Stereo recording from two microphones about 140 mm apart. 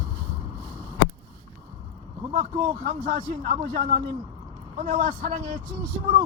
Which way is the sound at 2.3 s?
45° right (ahead or behind).